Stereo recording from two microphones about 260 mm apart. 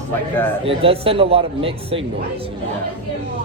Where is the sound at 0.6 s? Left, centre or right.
Right.